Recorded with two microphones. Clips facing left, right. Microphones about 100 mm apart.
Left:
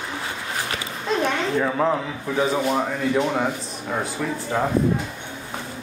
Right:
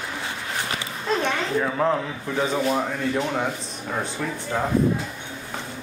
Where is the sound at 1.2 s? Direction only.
5° left (ahead or behind).